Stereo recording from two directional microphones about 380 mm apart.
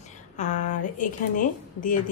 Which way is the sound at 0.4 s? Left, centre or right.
Centre.